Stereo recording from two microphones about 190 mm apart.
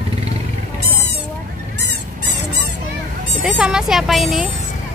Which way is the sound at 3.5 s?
5° right (ahead or behind).